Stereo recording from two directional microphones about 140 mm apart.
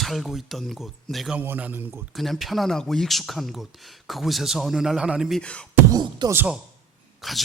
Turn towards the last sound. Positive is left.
turn(degrees=0)  # may be behind; listen again after turning